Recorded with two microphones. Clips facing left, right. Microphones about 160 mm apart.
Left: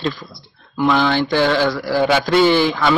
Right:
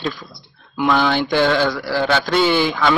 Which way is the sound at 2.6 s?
5° left (ahead or behind).